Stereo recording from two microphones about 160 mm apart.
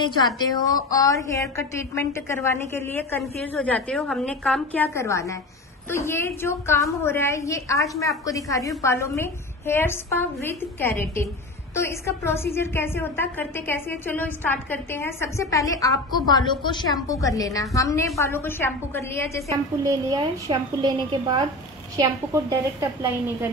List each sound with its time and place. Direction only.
0.2 s a woman's voice: 25° left (ahead or behind)
3.2 s a woman's voice: centre (ahead or behind)
4.8 s a woman's voice: 15° left (ahead or behind)
19.8 s a woman's voice: 20° right (ahead or behind)